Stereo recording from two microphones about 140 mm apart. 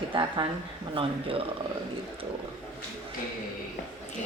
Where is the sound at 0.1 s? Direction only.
35° right (ahead or behind).